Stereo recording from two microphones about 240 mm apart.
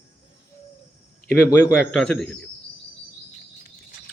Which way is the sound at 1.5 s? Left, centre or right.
Centre.